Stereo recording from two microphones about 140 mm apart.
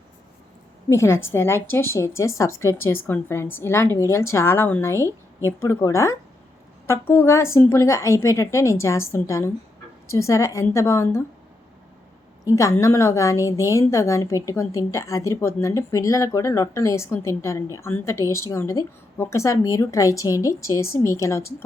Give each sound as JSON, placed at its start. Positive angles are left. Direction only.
{"t": 0.9, "sound": "a woman's voice", "side_deg": 20}
{"t": 12.5, "sound": "a woman's voice", "side_deg": 20}